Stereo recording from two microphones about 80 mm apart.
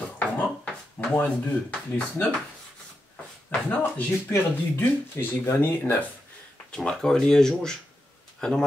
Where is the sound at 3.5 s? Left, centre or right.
Centre.